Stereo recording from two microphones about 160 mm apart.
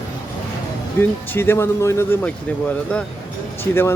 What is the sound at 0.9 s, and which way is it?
Speech, 15° left (ahead or behind).